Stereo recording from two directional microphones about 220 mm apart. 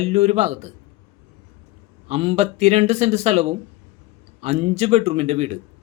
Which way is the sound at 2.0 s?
30° right (ahead or behind).